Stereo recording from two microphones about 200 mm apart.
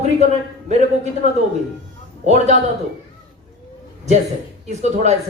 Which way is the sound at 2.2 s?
35° right (ahead or behind).